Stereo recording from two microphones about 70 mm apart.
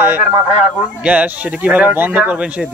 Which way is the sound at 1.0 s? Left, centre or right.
Right.